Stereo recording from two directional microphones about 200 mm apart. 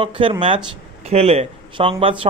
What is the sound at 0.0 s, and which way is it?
A man's voice, 25° right (ahead or behind).